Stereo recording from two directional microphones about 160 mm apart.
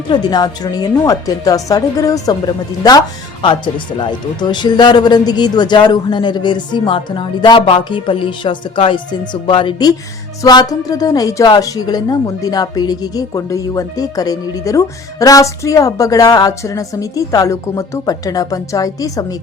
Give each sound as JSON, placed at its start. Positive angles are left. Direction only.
{"t": 0.1, "sound": "a woman's voice", "side_deg": 25}